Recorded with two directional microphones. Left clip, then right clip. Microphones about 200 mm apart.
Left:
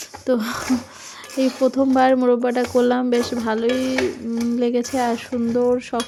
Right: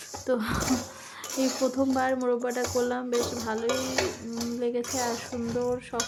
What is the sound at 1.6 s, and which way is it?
Speech, 25° left (ahead or behind).